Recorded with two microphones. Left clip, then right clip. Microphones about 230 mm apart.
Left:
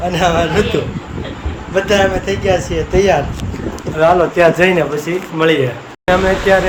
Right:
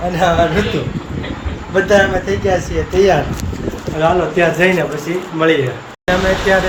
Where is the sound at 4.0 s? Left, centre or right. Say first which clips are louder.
Left 3 dB; centre.